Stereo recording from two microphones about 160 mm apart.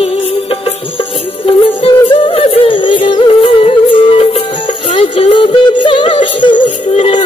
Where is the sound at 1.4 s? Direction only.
35° left (ahead or behind).